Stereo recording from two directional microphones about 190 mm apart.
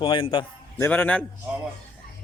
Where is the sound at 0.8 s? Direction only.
10° left (ahead or behind).